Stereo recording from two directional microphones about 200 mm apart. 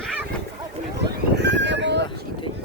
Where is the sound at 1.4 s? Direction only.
60° right (ahead or behind).